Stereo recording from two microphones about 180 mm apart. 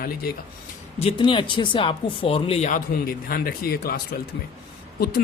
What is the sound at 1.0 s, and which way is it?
Speech, 30° left (ahead or behind).